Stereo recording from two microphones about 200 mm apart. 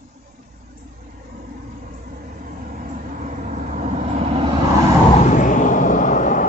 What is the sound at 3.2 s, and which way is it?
Vehicle, 35° right (ahead or behind).